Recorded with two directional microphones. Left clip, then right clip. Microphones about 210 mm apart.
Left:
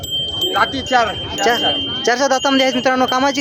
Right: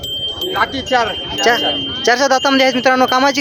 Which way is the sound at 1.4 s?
Centre (ahead or behind).